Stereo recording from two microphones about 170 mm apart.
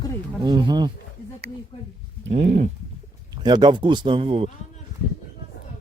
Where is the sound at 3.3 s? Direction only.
25° right (ahead or behind).